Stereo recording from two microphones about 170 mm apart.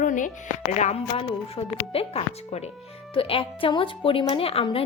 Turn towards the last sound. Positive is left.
turn(degrees=35)  # may be behind; listen again after turning